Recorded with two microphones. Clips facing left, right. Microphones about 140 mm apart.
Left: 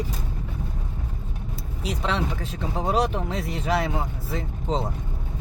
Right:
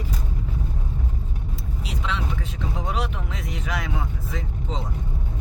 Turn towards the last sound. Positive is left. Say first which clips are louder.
# left 5 dB
turn(degrees=35)  # may be behind; listen again after turning